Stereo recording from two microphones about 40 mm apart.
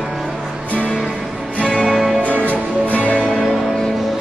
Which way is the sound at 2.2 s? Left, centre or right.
Left.